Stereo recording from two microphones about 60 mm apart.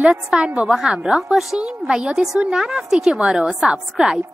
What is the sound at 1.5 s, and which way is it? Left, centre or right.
A woman's voice, centre.